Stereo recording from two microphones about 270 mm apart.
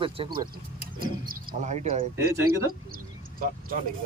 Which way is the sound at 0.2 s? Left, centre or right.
Centre.